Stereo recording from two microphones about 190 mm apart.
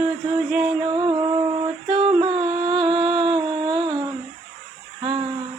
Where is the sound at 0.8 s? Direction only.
25° right (ahead or behind).